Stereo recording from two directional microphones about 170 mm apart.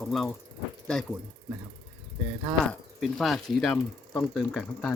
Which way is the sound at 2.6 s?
Centre (ahead or behind).